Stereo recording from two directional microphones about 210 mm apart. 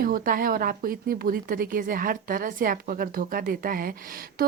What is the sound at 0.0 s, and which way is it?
A woman's voice, 45° right (ahead or behind).